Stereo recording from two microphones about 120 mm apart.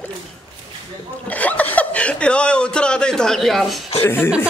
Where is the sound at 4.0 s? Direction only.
20° left (ahead or behind).